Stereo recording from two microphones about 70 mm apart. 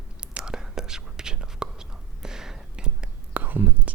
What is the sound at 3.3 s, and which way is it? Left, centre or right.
Whispering, right.